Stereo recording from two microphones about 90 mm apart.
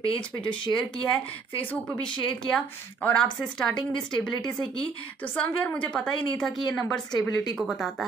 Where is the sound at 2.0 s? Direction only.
60° left (ahead or behind).